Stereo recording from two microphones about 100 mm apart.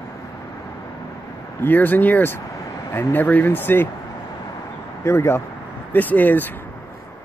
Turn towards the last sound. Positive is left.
turn(degrees=15)  # may be behind; listen again after turning